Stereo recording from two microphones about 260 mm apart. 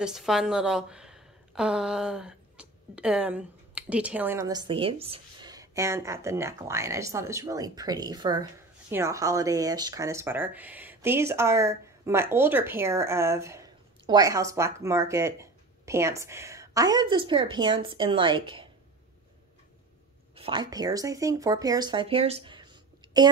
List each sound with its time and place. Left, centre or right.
0.0 s a woman's voice: centre
20.3 s a woman's voice: centre